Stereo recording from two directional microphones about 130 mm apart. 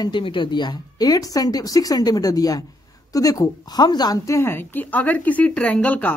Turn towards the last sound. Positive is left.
turn(degrees=10)  # may be behind; listen again after turning